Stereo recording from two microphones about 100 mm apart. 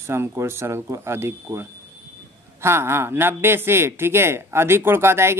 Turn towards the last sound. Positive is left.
turn(degrees=-25)  # may be behind; listen again after turning